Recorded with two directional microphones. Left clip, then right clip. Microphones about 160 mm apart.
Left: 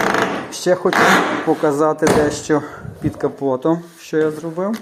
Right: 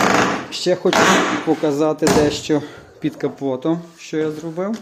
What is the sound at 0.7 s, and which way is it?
Speech, 25° right (ahead or behind).